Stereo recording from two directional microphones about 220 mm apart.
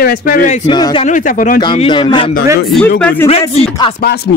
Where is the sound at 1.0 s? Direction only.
35° left (ahead or behind).